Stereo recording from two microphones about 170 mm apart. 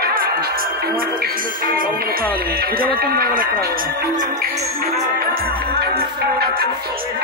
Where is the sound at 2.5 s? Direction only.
60° right (ahead or behind).